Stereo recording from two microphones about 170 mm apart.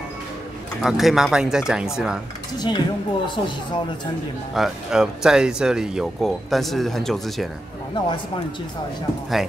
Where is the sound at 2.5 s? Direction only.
25° left (ahead or behind).